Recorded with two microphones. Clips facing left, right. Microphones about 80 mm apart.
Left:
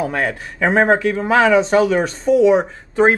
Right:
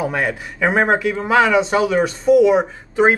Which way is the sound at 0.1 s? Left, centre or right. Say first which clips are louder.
Even; centre.